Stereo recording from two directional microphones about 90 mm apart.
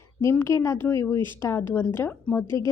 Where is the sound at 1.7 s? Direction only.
20° left (ahead or behind).